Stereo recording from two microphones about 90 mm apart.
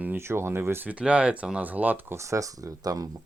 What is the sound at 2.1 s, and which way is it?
Speech, 35° right (ahead or behind).